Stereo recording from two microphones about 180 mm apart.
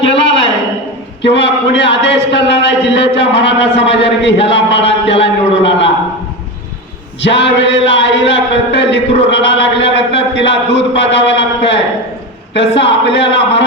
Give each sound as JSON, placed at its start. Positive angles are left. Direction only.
{"t": 0.1, "sound": "a sound", "side_deg": 80}
{"t": 1.2, "sound": "a man's voice", "side_deg": 75}
{"t": 7.2, "sound": "a man's voice", "side_deg": 75}
{"t": 12.8, "sound": "a man's voice", "side_deg": 80}